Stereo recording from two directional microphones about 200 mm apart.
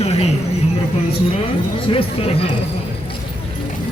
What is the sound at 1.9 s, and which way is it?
Speech, 30° left (ahead or behind).